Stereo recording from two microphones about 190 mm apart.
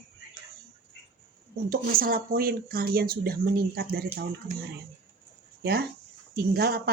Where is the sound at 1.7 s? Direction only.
50° right (ahead or behind).